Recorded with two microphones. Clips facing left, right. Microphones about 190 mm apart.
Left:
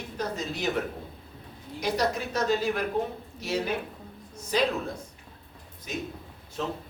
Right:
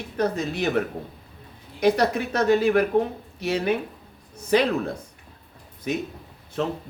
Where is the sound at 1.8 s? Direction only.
60° right (ahead or behind).